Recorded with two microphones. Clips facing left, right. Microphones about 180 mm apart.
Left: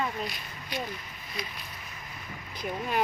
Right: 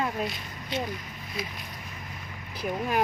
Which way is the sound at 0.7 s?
25° right (ahead or behind).